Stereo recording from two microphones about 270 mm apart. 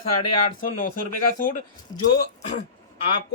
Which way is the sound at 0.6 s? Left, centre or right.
Left.